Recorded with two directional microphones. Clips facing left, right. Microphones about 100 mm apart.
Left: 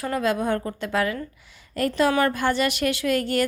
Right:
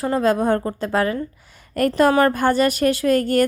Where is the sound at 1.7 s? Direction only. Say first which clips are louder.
Right 5 dB; 50° right (ahead or behind).